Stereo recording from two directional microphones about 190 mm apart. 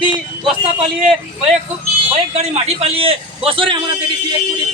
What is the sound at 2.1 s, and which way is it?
A man's voice, 35° right (ahead or behind).